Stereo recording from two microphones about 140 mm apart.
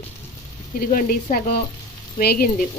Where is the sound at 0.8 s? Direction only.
90° left.